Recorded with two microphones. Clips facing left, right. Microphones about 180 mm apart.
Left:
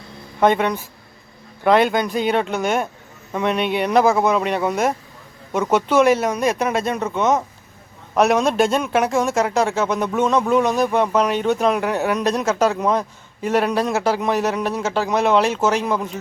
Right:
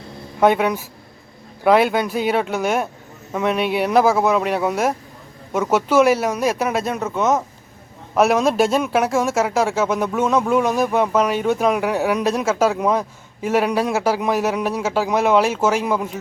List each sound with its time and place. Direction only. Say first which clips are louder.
0.3 s a man's voice: right 1 dB; 5° right (ahead or behind)